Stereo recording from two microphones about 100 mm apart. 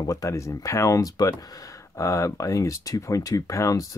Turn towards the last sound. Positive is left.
turn(degrees=35)  # may be behind; listen again after turning